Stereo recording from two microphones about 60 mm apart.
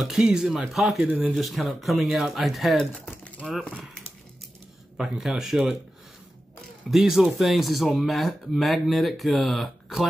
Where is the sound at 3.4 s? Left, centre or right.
Centre.